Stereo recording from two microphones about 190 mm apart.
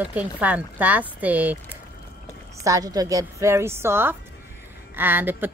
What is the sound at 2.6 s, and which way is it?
Speech, 20° right (ahead or behind).